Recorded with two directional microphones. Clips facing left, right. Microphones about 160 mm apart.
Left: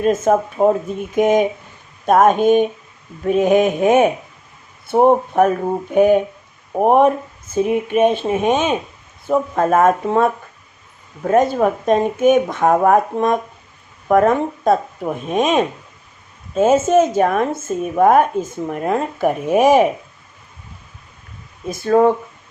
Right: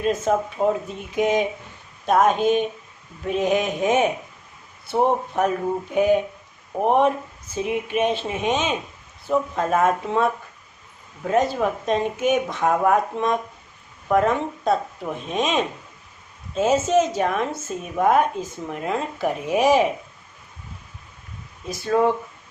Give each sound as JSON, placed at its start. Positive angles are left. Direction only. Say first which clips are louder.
{"t": 0.0, "sound": "a woman's voice", "louder": "left 6 dB", "side_deg": 50}
{"t": 21.7, "sound": "a woman's voice", "louder": "left 6 dB", "side_deg": 50}